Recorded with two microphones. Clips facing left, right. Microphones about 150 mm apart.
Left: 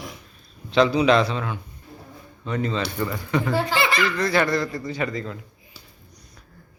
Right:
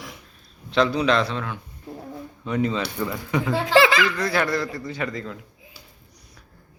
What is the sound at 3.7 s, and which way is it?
Laughter, 90° right.